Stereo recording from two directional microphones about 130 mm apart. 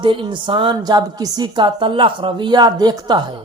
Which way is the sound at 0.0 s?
40° right (ahead or behind).